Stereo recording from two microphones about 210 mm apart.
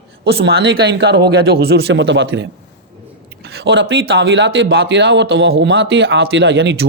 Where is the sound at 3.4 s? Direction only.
55° right (ahead or behind).